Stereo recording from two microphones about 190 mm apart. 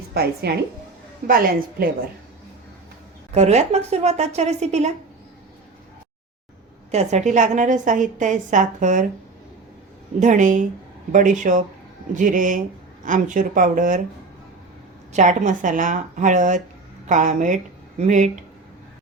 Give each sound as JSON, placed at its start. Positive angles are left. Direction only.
{"t": 0.1, "sound": "a woman's voice", "side_deg": -55}
{"t": 3.3, "sound": "a woman's voice", "side_deg": -35}
{"t": 6.9, "sound": "a woman's voice", "side_deg": -35}
{"t": 10.2, "sound": "a woman's voice", "side_deg": -40}
{"t": 15.1, "sound": "a woman's voice", "side_deg": -40}